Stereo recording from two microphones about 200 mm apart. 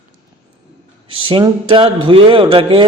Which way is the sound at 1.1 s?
25° right (ahead or behind).